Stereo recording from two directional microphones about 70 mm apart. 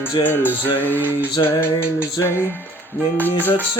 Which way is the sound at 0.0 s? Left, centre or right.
Left.